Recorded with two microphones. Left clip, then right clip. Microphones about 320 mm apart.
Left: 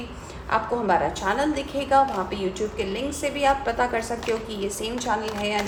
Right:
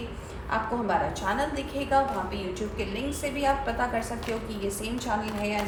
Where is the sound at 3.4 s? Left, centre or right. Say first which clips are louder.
Left 5 dB; left.